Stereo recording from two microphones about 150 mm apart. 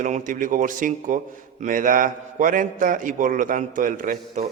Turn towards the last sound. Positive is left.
turn(degrees=-65)  # may be behind; listen again after turning